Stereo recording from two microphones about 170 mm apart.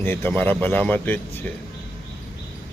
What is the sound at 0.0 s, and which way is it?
A man's voice, 10° left (ahead or behind).